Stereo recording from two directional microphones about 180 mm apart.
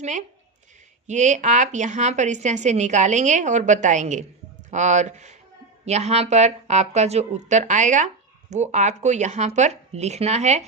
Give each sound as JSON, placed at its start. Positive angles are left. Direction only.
{"t": 0.0, "sound": "speech", "side_deg": -45}